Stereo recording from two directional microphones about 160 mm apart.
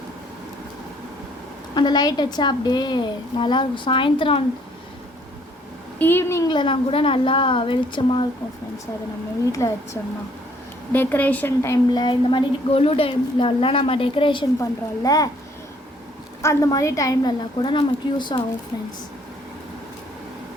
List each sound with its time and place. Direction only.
1.7 s a woman's voice: 25° left (ahead or behind)
6.0 s a woman's voice: 15° left (ahead or behind)
6.5 s a woman's voice: 30° left (ahead or behind)
9.5 s a woman's voice: 20° left (ahead or behind)
12.0 s a woman's voice: 30° left (ahead or behind)
14.6 s a woman's voice: 20° left (ahead or behind)
16.4 s a woman's voice: 20° left (ahead or behind)